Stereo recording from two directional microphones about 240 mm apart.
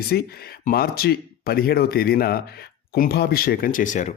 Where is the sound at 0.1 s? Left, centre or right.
Left.